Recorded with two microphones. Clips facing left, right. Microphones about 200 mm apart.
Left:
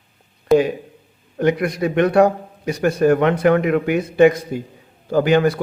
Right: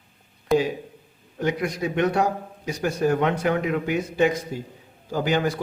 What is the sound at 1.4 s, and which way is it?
Speech, 60° left (ahead or behind).